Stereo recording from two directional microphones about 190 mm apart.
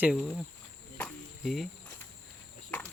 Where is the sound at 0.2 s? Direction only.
5° left (ahead or behind).